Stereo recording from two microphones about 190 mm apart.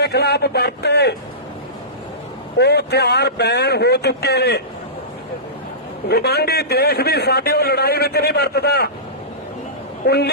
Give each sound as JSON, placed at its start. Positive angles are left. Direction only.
{"t": 0.0, "sound": "a man's voice", "side_deg": 60}
{"t": 2.6, "sound": "a man's voice", "side_deg": 60}
{"t": 6.1, "sound": "a man's voice", "side_deg": 55}
{"t": 10.1, "sound": "a man's voice", "side_deg": 60}